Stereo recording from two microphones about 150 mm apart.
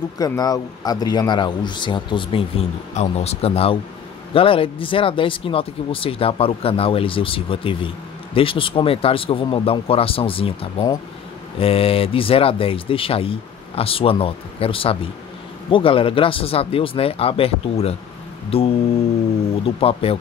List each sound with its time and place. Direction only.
0.2 s speech: 25° left (ahead or behind)
3.0 s speech: 45° left (ahead or behind)